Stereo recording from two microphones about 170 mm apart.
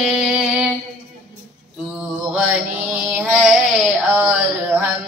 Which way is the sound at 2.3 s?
5° right (ahead or behind).